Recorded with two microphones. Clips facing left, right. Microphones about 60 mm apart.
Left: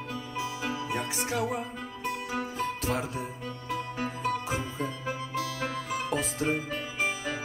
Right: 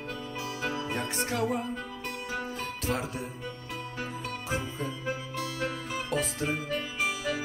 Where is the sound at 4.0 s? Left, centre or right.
Left.